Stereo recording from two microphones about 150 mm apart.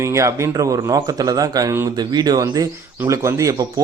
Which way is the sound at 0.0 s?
20° right (ahead or behind).